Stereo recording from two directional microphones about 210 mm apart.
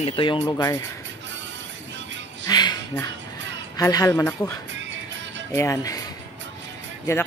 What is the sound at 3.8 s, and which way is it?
Speech, 15° left (ahead or behind).